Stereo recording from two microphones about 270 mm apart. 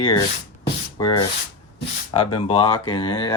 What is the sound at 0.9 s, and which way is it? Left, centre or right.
Rub, centre.